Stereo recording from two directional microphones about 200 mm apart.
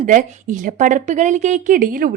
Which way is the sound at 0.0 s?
40° right (ahead or behind).